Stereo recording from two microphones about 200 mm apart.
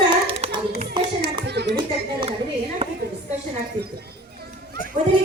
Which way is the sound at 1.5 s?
55° right (ahead or behind).